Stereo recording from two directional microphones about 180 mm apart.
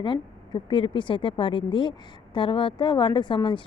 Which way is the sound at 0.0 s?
25° left (ahead or behind).